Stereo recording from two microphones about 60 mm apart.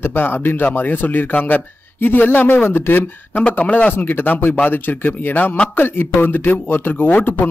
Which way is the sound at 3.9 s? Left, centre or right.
Left.